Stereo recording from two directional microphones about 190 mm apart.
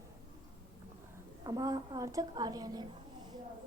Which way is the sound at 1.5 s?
20° right (ahead or behind).